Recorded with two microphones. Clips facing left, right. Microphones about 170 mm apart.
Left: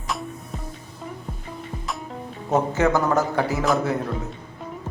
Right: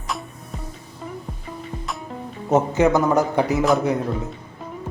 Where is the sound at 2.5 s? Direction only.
20° right (ahead or behind).